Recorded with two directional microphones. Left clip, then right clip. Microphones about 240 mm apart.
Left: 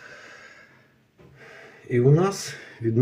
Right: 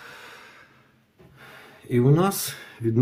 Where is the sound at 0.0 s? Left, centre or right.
Right.